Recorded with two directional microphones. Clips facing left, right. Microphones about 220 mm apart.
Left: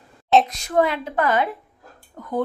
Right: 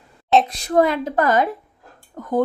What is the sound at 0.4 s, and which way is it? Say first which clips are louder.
Speech: right 3 dB; 35° right (ahead or behind).